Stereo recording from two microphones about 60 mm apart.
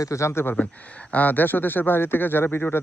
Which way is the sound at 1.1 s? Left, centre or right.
Left.